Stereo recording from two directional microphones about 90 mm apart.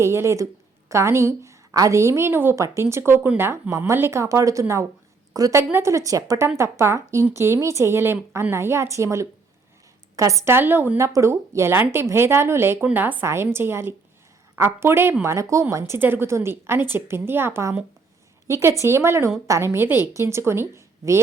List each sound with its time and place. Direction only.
0.0 s a woman's voice: 30° right (ahead or behind)
13.2 s a woman's voice: 30° right (ahead or behind)
16.0 s a woman's voice: 25° right (ahead or behind)